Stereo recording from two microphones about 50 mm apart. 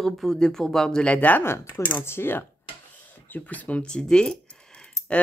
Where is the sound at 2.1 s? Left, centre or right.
Left.